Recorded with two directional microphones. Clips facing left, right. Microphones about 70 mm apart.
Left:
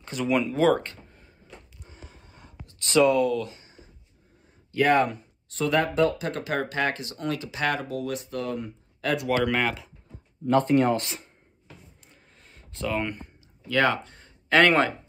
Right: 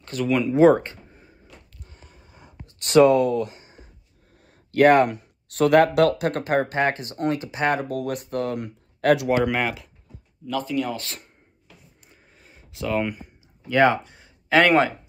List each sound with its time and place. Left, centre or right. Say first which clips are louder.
0.0 s speech: right 3 dB; centre
0.5 s speech: right 6 dB; right
2.8 s speech: right 5 dB; right
4.7 s speech: right 6 dB; right
6.4 s speech: right 5 dB; right
7.9 s speech: right 4 dB; right
8.5 s speech: right 3 dB; right
9.3 s speech: right 2 dB; centre
10.4 s speech: left 5 dB; left
12.1 s a sound: right 2 dB; centre
12.9 s speech: right 5 dB; centre
13.7 s speech: right 5 dB; right